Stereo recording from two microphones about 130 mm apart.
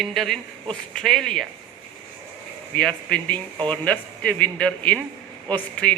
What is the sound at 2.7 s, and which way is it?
A woman's voice, 10° left (ahead or behind).